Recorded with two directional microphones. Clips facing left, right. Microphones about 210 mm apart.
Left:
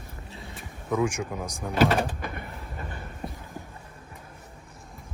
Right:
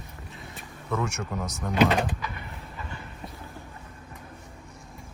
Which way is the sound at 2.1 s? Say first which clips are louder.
Left 2 dB; 50° left (ahead or behind).